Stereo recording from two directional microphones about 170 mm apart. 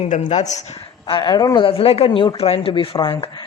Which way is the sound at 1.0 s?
25° left (ahead or behind).